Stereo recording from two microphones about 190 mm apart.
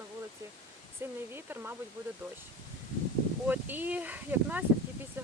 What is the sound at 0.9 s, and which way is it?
Speech, 10° right (ahead or behind).